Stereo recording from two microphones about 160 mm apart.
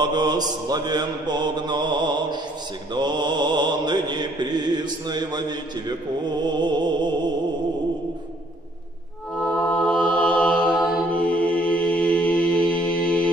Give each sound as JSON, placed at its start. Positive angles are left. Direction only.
{"t": 0.0, "sound": "mantra", "side_deg": -25}
{"t": 9.8, "sound": "mantra", "side_deg": 5}
{"t": 12.7, "sound": "music", "side_deg": 10}